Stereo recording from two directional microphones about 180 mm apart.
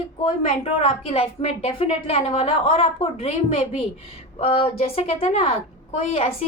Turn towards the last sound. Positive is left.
turn(degrees=35)  # may be behind; listen again after turning